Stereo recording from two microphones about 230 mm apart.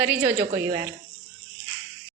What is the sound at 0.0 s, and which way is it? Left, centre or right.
Speech, centre.